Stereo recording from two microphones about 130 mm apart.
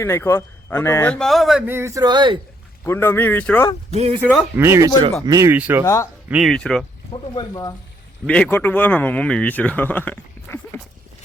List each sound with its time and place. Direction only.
0.0 s speech: 20° left (ahead or behind)
1.1 s speech: 5° left (ahead or behind)
1.6 s speech: 20° right (ahead or behind); by 2.4 s 35° right (ahead or behind)
2.8 s speech: 15° left (ahead or behind)
3.9 s speech: 55° right (ahead or behind)
4.5 s speech: 20° right (ahead or behind)
5.5 s speech: 15° right (ahead or behind)
5.8 s speech: 25° left (ahead or behind)
6.2 s speech: 10° right (ahead or behind)
6.5 s speech: 5° left (ahead or behind)
7.1 s speech: 35° left (ahead or behind)
8.3 s speech: 15° left (ahead or behind)